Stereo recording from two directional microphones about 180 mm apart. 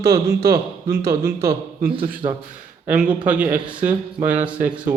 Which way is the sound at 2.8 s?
10° right (ahead or behind).